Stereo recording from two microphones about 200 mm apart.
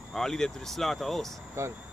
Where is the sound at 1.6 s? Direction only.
15° right (ahead or behind).